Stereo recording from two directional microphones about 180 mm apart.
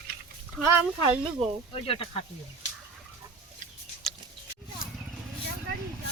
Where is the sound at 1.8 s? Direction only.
30° left (ahead or behind).